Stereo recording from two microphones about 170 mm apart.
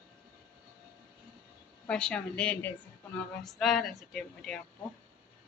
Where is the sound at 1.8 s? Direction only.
5° left (ahead or behind).